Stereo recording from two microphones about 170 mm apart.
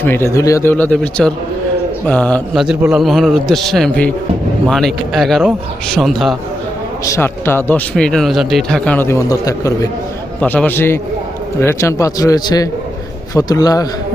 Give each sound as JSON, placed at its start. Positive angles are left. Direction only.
{"t": 0.0, "sound": "a man's voice", "side_deg": 15}
{"t": 7.0, "sound": "speech", "side_deg": 15}
{"t": 10.4, "sound": "a man's voice", "side_deg": 10}